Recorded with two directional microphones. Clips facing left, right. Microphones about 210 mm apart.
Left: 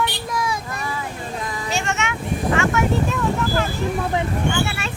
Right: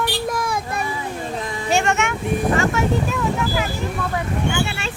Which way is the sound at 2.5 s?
30° right (ahead or behind).